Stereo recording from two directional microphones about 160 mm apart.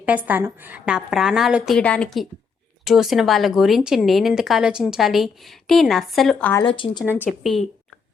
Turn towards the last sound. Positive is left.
turn(degrees=-10)  # may be behind; listen again after turning